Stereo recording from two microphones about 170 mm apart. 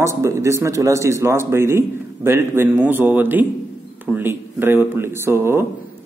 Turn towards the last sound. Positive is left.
turn(degrees=-15)  # may be behind; listen again after turning